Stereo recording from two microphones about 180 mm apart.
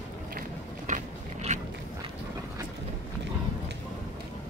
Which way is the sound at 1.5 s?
45° right (ahead or behind).